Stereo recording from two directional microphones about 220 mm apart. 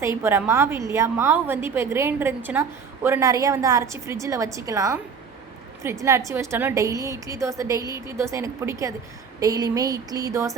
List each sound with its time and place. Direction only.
0.2 s a woman's voice: 10° right (ahead or behind)